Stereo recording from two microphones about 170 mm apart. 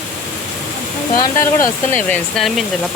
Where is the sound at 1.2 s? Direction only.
15° left (ahead or behind).